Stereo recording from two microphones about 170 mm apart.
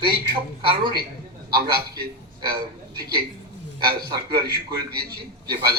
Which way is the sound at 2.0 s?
65° right (ahead or behind).